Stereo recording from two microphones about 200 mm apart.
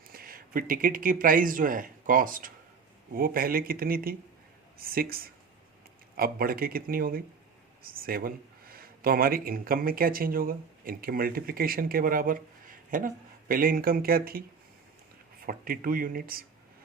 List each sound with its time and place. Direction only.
0.1 s speech: 45° right (ahead or behind)
15.4 s speech: 45° right (ahead or behind)